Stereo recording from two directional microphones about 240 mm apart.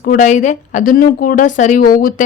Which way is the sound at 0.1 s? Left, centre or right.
Left.